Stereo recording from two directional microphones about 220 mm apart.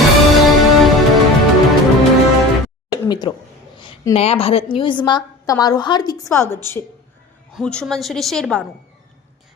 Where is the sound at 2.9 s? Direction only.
20° left (ahead or behind).